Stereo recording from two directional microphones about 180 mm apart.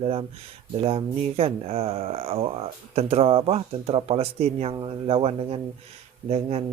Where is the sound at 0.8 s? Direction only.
30° right (ahead or behind).